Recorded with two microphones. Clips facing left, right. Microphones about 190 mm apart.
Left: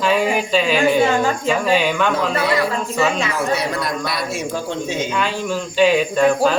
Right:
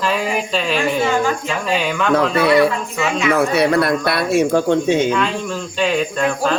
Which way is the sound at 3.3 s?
65° right (ahead or behind).